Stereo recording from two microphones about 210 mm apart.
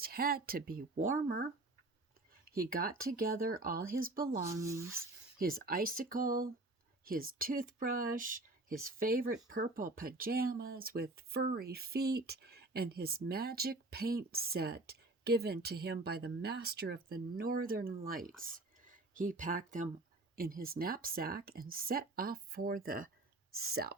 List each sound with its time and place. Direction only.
0.0 s speech: 45° right (ahead or behind)
2.6 s speech: 45° right (ahead or behind)
4.6 s speech: 15° right (ahead or behind)
5.4 s speech: 45° right (ahead or behind)